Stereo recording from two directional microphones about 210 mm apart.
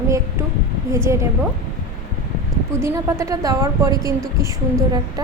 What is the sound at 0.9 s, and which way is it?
Speech, 15° right (ahead or behind).